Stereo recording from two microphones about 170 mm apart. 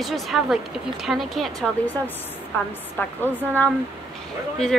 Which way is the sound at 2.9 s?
10° left (ahead or behind).